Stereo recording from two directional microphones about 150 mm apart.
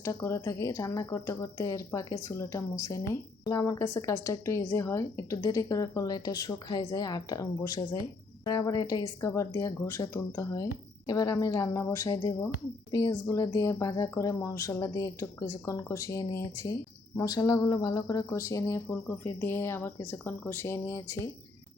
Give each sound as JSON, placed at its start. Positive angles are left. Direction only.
{"t": 0.0, "sound": "speech", "side_deg": 20}